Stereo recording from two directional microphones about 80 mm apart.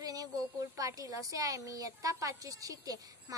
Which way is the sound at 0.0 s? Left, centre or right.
Right.